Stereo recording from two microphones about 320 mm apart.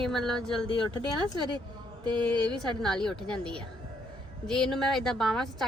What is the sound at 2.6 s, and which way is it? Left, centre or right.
Speech, centre.